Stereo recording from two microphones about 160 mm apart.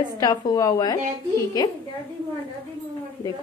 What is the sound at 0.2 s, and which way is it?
Speech, 25° left (ahead or behind).